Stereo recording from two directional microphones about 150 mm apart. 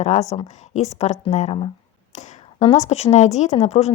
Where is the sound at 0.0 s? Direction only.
50° left (ahead or behind).